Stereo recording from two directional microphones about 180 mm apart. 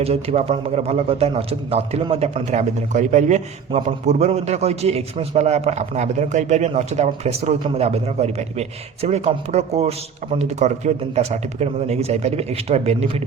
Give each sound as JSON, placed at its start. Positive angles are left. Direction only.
{"t": 0.0, "sound": "a man's voice", "side_deg": -35}